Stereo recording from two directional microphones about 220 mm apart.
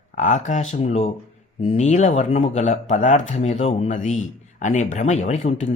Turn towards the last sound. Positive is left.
turn(degrees=30)  # may be behind; listen again after turning